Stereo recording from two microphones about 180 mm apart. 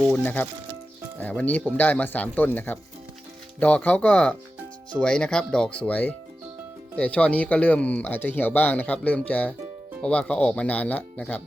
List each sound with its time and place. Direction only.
0.0 s speech: 10° left (ahead or behind)